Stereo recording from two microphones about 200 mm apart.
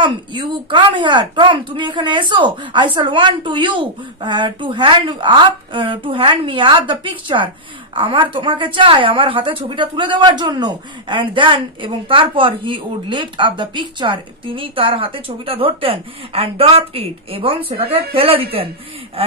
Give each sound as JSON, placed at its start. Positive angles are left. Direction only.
{"t": 0.0, "sound": "a woman's voice", "side_deg": -25}